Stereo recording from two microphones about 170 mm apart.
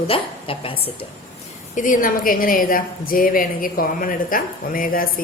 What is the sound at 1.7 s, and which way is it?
A woman's voice, 50° left (ahead or behind).